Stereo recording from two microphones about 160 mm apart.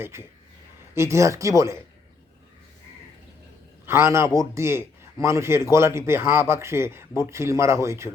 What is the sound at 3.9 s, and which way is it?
A man's voice, 15° right (ahead or behind).